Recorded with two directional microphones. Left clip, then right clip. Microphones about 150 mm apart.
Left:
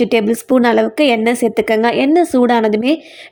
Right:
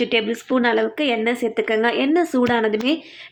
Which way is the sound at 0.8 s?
50° left (ahead or behind).